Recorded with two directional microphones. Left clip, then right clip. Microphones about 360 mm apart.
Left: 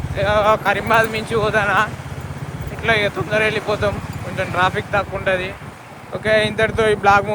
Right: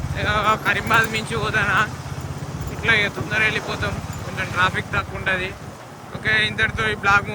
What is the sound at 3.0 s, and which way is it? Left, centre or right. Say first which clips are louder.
Speech: left 2 dB; centre.